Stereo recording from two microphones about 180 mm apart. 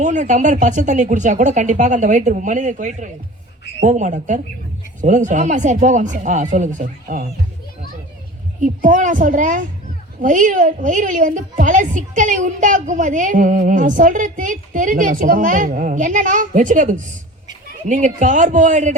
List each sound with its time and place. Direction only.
0.0 s a woman's voice: 45° right (ahead or behind)
8.6 s a woman's voice: 45° right (ahead or behind)